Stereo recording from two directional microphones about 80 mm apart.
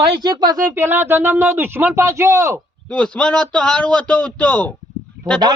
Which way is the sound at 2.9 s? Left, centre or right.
Centre.